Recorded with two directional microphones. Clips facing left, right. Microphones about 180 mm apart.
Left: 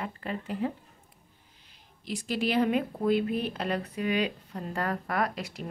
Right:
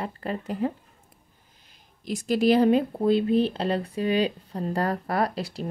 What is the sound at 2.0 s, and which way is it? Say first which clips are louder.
Speech: right 8 dB; 45° right (ahead or behind).